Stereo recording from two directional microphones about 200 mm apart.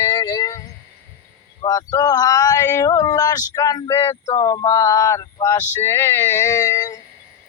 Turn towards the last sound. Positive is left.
turn(degrees=15)  # may be behind; listen again after turning